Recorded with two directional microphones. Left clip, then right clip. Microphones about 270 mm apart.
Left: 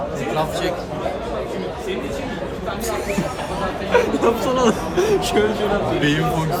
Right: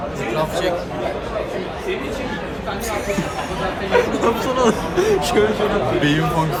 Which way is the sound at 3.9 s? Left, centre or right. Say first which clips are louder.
Even; centre.